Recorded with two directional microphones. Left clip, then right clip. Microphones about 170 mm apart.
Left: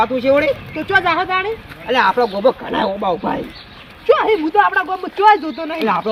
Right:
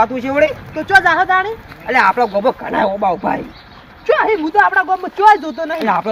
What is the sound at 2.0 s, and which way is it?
Speech, 20° right (ahead or behind).